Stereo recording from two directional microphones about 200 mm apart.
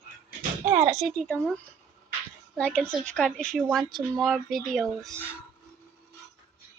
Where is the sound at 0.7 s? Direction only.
25° right (ahead or behind).